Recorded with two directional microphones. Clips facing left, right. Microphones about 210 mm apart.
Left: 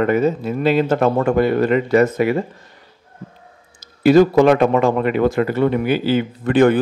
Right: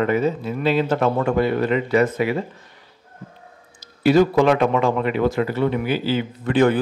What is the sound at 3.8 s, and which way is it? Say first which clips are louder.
A man's voice: left 4 dB; 45° left (ahead or behind).